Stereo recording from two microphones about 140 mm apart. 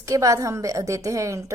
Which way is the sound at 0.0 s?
25° right (ahead or behind).